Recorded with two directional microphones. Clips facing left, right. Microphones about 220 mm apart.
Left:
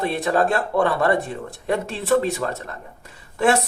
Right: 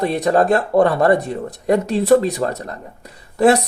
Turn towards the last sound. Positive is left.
turn(degrees=-40)  # may be behind; listen again after turning